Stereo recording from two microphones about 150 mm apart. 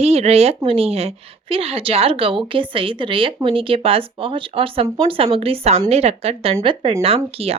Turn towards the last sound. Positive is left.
turn(degrees=-40)  # may be behind; listen again after turning